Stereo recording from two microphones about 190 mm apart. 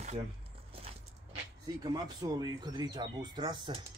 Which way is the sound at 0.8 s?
25° right (ahead or behind).